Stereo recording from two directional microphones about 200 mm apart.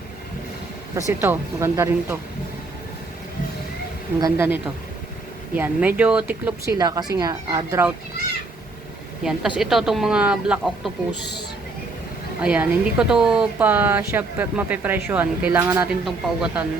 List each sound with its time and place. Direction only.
0.9 s speech: 10° right (ahead or behind)
4.2 s speech: 10° right (ahead or behind)
6.7 s speech: 20° right (ahead or behind)
9.2 s a woman's voice: centre (ahead or behind)
12.4 s speech: 5° right (ahead or behind)
16.0 s a woman's voice: centre (ahead or behind)